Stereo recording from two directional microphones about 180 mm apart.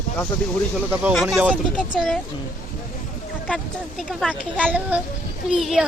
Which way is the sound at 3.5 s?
Centre (ahead or behind).